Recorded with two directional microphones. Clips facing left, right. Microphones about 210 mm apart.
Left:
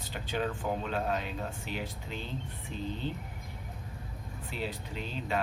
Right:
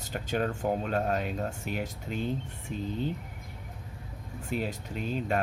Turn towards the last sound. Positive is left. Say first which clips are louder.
# right 4 dB
turn(degrees=-45)  # may be behind; listen again after turning